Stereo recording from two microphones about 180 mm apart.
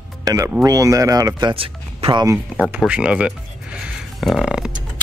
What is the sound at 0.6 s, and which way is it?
Speech, 20° right (ahead or behind).